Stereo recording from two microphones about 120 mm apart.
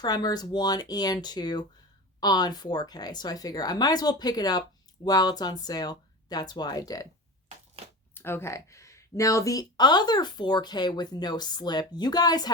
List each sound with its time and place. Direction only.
0.0 s speech: 35° left (ahead or behind)
7.8 s a sound: 50° right (ahead or behind)
8.1 s speech: 20° left (ahead or behind)